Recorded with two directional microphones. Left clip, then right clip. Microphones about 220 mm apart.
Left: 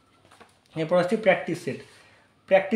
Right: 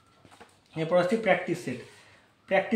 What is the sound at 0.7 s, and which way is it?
Speech, 45° left (ahead or behind).